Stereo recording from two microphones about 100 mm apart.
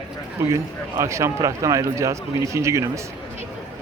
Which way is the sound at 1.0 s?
30° right (ahead or behind).